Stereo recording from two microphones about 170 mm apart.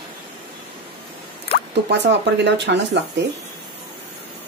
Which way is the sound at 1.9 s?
90° right.